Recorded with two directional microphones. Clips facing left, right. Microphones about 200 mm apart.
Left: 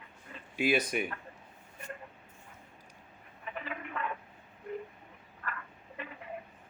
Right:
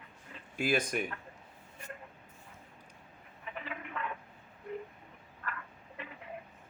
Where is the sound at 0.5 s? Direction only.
5° left (ahead or behind).